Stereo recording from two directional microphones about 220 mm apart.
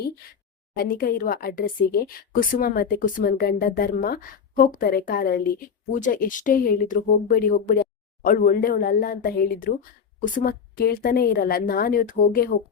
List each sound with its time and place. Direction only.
0.8 s a woman's voice: 40° left (ahead or behind)